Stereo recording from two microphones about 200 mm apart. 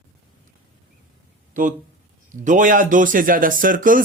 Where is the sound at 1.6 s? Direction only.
40° right (ahead or behind).